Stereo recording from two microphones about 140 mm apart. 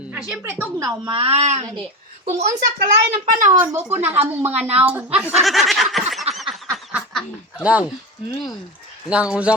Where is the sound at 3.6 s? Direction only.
15° right (ahead or behind).